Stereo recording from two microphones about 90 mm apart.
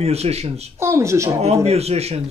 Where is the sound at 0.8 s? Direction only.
30° right (ahead or behind).